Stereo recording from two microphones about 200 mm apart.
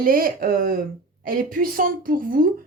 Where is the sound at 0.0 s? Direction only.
45° right (ahead or behind).